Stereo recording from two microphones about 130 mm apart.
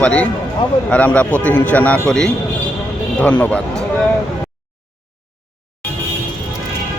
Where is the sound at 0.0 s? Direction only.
10° left (ahead or behind).